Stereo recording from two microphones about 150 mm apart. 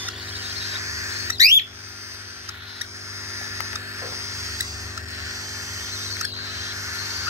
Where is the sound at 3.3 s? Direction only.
20° right (ahead or behind).